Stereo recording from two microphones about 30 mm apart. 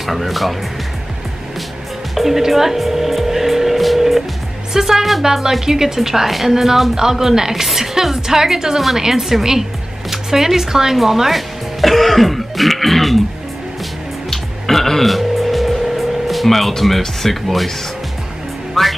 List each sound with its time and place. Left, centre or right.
0.0 s speech: centre
2.1 s music: centre
4.7 s a woman's voice: centre
8.7 s a woman's voice: centre
14.3 s music: centre
16.0 s speech: centre
18.8 s music: centre